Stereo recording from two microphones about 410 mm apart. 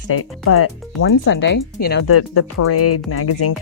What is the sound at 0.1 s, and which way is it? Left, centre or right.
Speech, left.